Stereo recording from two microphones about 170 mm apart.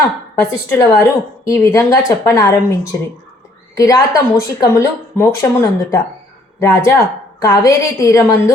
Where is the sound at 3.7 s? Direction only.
20° left (ahead or behind).